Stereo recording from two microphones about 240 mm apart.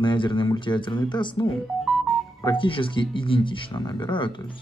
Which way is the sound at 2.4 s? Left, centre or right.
Left.